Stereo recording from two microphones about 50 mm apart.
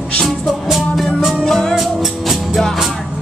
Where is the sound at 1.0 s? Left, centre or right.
Centre.